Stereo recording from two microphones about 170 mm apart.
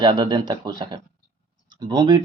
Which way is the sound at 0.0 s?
30° right (ahead or behind).